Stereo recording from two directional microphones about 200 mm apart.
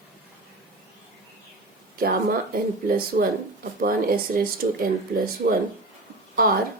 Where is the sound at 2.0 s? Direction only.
45° right (ahead or behind).